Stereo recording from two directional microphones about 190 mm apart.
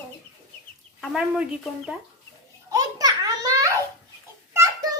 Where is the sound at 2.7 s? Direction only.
20° right (ahead or behind).